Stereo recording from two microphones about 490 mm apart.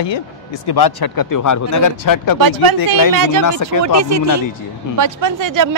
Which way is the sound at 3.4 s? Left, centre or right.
Left.